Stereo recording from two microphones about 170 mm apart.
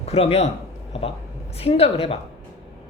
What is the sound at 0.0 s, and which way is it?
Speech, 35° left (ahead or behind).